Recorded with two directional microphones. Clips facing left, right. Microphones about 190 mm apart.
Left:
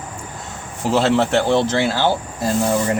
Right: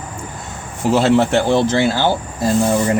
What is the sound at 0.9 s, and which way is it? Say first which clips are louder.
Speech: right 2 dB; 15° right (ahead or behind).